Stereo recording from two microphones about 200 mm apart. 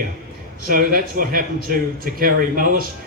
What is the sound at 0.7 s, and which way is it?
A man's voice, 45° right (ahead or behind).